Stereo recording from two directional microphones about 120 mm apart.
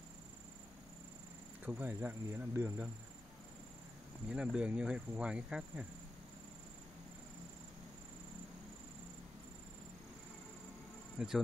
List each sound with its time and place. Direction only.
1.6 s speech: 15° right (ahead or behind)
4.3 s speech: 10° right (ahead or behind)
11.1 s insect: 5° right (ahead or behind)